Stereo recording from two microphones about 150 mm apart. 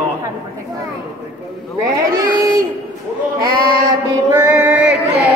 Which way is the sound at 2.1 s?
25° right (ahead or behind).